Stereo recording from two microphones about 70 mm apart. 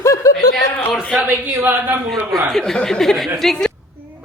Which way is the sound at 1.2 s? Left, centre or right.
Right.